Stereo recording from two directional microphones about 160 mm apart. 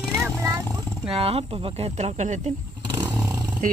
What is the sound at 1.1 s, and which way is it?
Speech, 35° right (ahead or behind).